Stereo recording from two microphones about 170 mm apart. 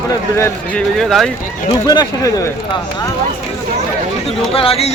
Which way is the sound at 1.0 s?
Centre (ahead or behind).